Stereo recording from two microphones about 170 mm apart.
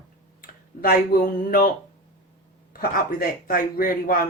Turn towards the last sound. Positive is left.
turn(degrees=60)  # may be behind; listen again after turning